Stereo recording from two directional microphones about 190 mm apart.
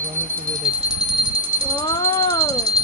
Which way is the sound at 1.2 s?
25° right (ahead or behind).